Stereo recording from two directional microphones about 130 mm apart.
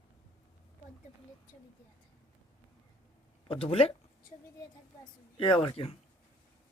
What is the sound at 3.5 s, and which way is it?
Speech, 45° left (ahead or behind).